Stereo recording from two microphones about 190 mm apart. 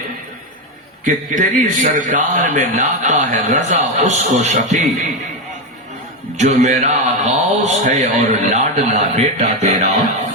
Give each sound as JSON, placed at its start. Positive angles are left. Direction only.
{"t": 1.0, "sound": "a man's voice", "side_deg": -45}
{"t": 6.4, "sound": "a man's voice", "side_deg": -40}